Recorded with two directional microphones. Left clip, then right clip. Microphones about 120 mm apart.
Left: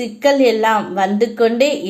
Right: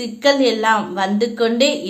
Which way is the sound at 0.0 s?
30° left (ahead or behind).